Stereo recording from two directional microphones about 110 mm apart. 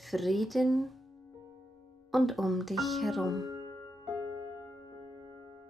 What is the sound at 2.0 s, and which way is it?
Speech, centre (ahead or behind).